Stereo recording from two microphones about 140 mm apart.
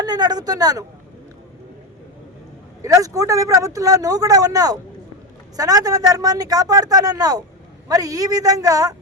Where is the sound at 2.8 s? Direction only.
25° right (ahead or behind).